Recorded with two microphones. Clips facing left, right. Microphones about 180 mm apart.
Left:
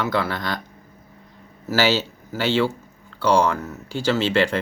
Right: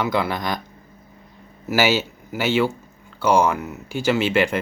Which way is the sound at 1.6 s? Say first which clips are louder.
Right 1 dB; 10° right (ahead or behind).